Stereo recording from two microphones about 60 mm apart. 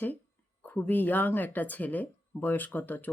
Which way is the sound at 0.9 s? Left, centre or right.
Left.